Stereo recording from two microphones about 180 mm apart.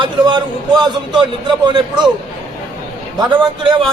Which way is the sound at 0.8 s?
25° right (ahead or behind).